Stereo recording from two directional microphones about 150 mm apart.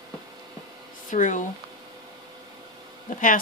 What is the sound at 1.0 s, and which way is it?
Speech, 60° left (ahead or behind).